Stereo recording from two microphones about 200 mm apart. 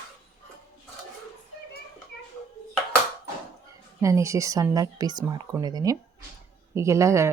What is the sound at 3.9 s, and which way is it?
A woman's voice, 15° right (ahead or behind).